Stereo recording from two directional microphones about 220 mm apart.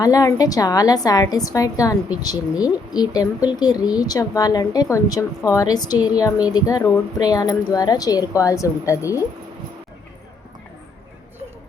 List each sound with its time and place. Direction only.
0.0 s speech: 15° left (ahead or behind)